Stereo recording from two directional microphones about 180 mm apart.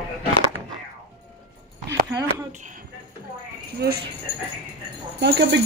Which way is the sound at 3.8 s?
60° right (ahead or behind).